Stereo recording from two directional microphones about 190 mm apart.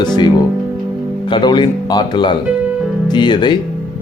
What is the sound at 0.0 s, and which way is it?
Speech, 20° left (ahead or behind).